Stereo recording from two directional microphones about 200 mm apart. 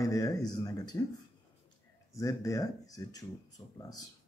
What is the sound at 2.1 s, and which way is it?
Speech, 15° left (ahead or behind).